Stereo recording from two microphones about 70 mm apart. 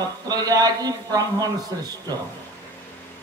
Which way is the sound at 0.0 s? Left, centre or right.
Right.